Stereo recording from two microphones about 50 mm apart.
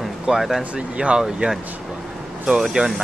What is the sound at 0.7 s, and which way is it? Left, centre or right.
Speech, right.